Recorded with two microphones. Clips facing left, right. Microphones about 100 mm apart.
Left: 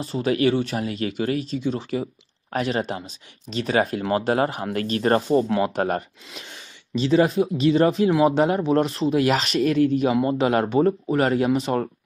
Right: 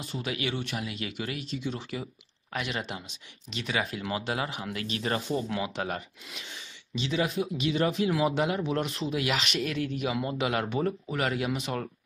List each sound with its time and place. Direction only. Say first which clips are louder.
0.0 s speech: left 12 dB; 40° left (ahead or behind)